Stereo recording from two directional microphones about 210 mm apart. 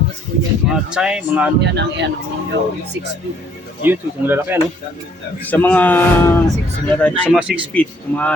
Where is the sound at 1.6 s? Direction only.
55° right (ahead or behind).